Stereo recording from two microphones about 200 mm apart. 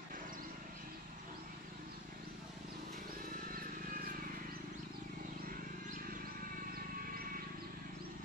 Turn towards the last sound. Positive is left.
turn(degrees=-50)  # may be behind; listen again after turning